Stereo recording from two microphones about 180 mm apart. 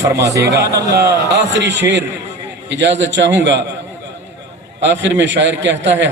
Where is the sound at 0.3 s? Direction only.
20° right (ahead or behind).